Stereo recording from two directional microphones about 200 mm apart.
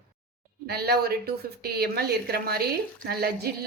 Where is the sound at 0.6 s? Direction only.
50° right (ahead or behind).